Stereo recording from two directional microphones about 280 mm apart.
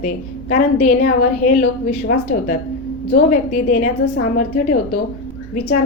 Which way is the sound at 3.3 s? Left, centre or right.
Left.